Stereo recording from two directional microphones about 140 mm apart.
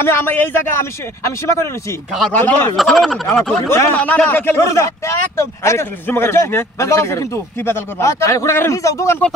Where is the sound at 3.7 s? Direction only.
20° left (ahead or behind).